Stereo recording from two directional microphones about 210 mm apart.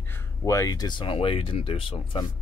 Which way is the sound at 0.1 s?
15° left (ahead or behind).